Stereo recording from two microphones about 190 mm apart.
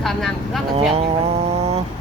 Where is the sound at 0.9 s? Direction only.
30° right (ahead or behind).